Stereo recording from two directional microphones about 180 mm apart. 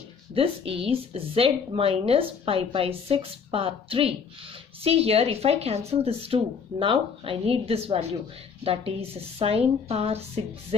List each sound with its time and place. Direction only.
0.3 s a woman's voice: 30° right (ahead or behind)